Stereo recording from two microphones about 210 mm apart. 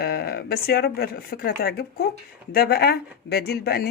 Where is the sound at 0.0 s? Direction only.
50° left (ahead or behind).